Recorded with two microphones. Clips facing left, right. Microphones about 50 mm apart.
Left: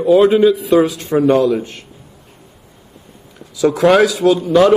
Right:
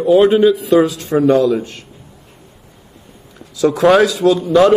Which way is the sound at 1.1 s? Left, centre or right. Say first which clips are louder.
Even; centre.